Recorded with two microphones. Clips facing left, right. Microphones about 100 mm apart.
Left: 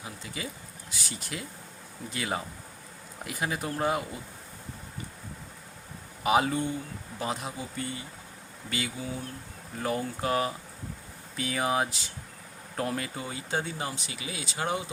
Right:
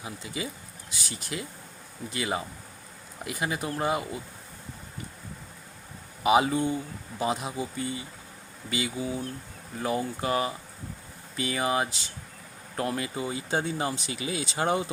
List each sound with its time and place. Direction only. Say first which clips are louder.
0.4 s speech: right 4 dB; 15° right (ahead or behind)
0.9 s speech: right 2 dB; centre (ahead or behind)
6.2 s speech: right 3 dB; 10° right (ahead or behind); by 14.8 s 30° right (ahead or behind)